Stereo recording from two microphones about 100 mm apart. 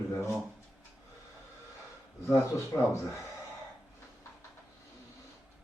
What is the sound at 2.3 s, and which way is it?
Speech, 30° left (ahead or behind).